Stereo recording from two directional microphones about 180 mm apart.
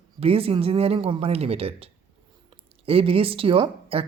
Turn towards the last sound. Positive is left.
turn(degrees=-30)  # may be behind; listen again after turning